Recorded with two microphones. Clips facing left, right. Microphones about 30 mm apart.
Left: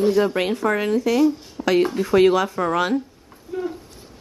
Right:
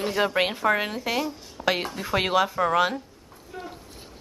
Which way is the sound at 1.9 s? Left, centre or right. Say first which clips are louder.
Left 9 dB; centre.